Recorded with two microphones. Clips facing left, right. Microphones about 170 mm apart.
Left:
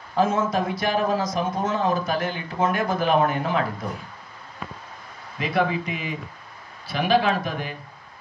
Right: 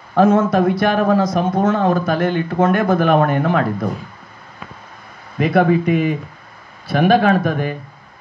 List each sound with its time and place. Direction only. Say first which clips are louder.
0.1 s a man's voice: right 8 dB; 60° right (ahead or behind)
5.4 s speech: right 9 dB; 55° right (ahead or behind)